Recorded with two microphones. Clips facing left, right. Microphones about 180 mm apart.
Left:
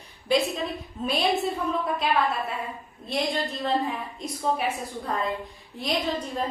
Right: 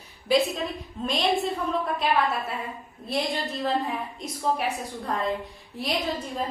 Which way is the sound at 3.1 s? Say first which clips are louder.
Left 1 dB; centre (ahead or behind).